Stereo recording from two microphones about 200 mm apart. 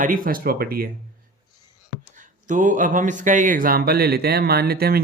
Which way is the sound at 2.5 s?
40° right (ahead or behind).